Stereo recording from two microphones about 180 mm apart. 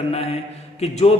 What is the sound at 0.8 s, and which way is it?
Speech, 35° left (ahead or behind).